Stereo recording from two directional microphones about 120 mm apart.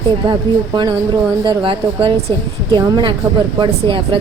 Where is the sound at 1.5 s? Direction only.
45° right (ahead or behind).